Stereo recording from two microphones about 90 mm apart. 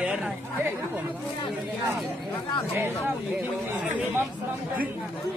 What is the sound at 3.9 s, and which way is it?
Speech, 20° right (ahead or behind).